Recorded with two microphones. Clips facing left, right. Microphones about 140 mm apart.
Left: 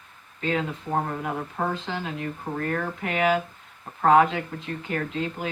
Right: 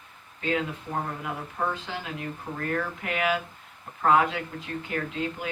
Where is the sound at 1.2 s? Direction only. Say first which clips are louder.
Left 3 dB; 40° left (ahead or behind).